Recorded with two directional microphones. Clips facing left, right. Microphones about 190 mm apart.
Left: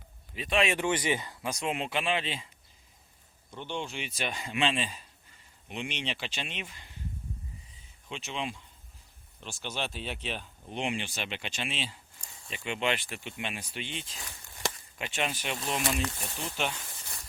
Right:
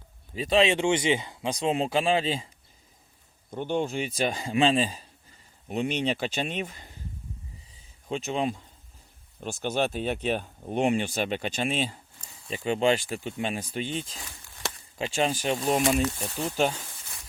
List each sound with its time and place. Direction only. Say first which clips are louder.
0.3 s speech: right 6 dB; 35° right (ahead or behind)
3.5 s speech: right 9 dB; 45° right (ahead or behind)
8.0 s speech: right 8 dB; 40° right (ahead or behind)